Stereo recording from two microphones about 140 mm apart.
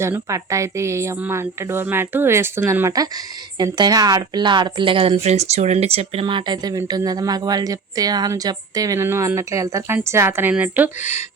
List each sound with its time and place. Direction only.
0.0 s a woman's voice: 20° right (ahead or behind)